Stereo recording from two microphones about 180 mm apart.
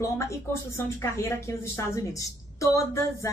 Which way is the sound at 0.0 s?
15° left (ahead or behind).